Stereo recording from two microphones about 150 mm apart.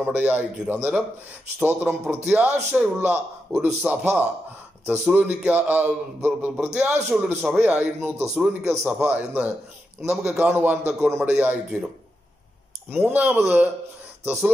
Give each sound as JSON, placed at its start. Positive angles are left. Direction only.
{"t": 0.0, "sound": "a man's voice", "side_deg": -10}
{"t": 12.9, "sound": "a man's voice", "side_deg": -10}